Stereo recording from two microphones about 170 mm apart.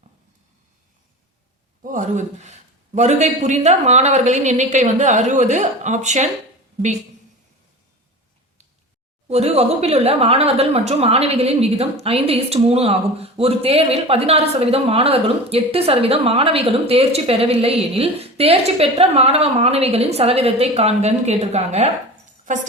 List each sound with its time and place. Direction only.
1.8 s a man's voice: 50° right (ahead or behind)
9.3 s speech: 40° right (ahead or behind)